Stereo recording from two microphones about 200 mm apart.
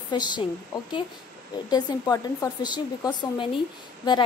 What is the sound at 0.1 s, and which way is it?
Speech, 20° left (ahead or behind).